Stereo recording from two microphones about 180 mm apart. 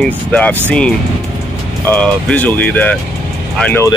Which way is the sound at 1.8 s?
10° left (ahead or behind).